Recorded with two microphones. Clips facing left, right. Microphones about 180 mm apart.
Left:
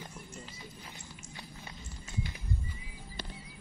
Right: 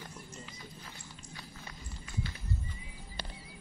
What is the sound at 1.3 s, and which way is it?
Run, 25° left (ahead or behind).